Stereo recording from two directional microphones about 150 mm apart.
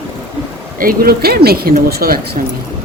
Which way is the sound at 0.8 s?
80° right.